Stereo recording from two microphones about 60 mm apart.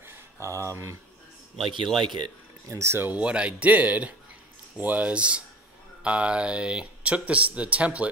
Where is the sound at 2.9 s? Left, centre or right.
Right.